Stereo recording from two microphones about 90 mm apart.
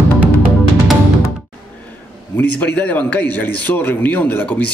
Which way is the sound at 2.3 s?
20° left (ahead or behind).